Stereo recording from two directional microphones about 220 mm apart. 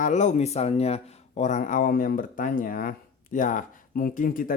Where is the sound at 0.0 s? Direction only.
30° left (ahead or behind).